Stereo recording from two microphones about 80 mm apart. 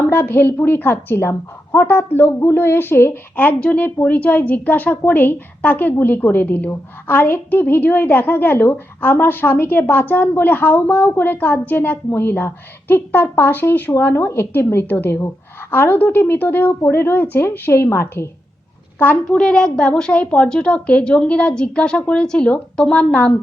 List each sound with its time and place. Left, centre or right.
0.0 s a woman's voice: left
18.9 s a woman's voice: left
19.2 s a woman's voice: centre